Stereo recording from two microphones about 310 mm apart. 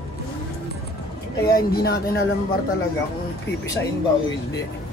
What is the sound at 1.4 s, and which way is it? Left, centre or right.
Speech, left.